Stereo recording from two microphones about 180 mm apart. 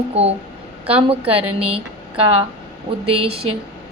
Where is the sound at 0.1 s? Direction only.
35° right (ahead or behind).